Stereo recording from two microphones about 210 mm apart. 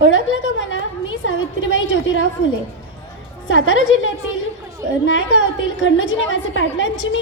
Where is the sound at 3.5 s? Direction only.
65° left (ahead or behind).